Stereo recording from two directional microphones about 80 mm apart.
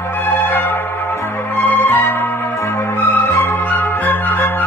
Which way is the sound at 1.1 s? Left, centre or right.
Left.